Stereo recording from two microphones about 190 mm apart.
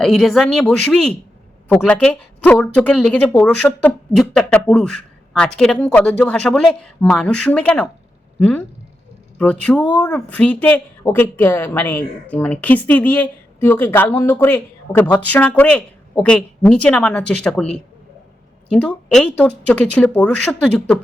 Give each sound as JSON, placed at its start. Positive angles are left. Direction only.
{"t": 0.0, "sound": "speech", "side_deg": 0}